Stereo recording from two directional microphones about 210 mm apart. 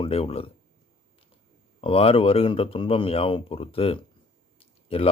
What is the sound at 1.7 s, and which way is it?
A man's voice, 25° left (ahead or behind).